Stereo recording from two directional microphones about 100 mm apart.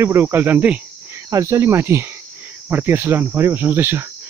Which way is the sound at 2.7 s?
20° right (ahead or behind).